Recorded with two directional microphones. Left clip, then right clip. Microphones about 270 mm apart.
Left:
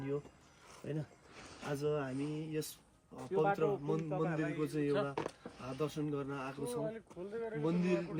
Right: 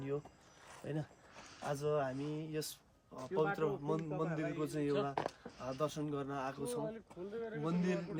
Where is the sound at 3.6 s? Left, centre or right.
Centre.